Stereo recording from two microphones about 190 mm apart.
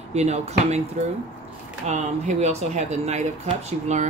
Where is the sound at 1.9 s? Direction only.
35° right (ahead or behind).